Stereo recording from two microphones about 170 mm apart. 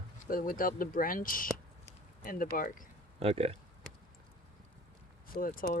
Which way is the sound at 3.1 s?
35° right (ahead or behind).